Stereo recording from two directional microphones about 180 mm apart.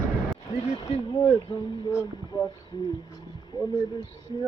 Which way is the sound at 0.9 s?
35° left (ahead or behind).